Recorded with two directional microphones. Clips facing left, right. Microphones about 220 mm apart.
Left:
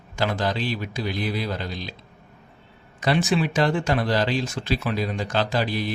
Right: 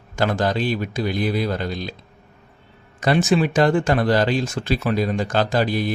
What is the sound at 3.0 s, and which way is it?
Speech, 45° right (ahead or behind).